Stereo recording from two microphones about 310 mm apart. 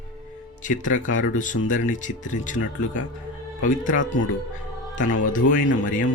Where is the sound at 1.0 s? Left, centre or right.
Left.